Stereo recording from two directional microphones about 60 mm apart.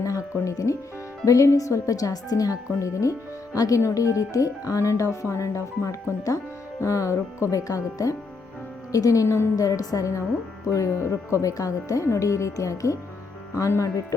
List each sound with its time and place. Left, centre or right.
0.0 s speech: left
9.6 s speech: left
12.0 s speech: left